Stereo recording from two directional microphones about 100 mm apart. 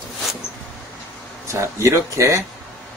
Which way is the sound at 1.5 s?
30° right (ahead or behind).